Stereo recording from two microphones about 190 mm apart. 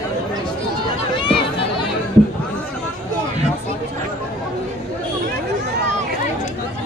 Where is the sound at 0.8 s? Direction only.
25° left (ahead or behind).